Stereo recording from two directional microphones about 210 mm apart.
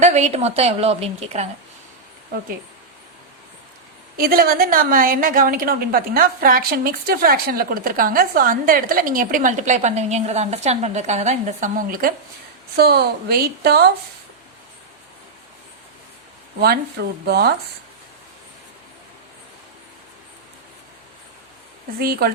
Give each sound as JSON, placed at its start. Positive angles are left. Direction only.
{"t": 0.0, "sound": "a woman's voice", "side_deg": -35}
{"t": 4.2, "sound": "a woman's voice", "side_deg": -45}
{"t": 16.6, "sound": "a woman's voice", "side_deg": -50}
{"t": 22.0, "sound": "a woman's voice", "side_deg": -45}